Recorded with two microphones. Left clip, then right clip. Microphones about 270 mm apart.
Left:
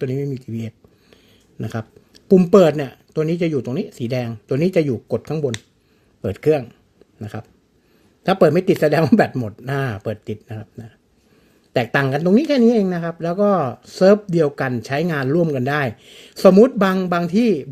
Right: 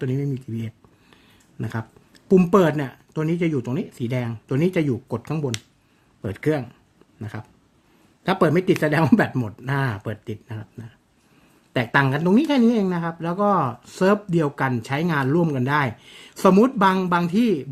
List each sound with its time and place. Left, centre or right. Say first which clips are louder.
0.2 s speech: left 3 dB; centre
15.9 s speech: left 3 dB; right
16.3 s speech: left 6 dB; centre